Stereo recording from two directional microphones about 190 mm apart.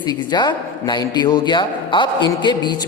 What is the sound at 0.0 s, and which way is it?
A man's voice, 20° left (ahead or behind).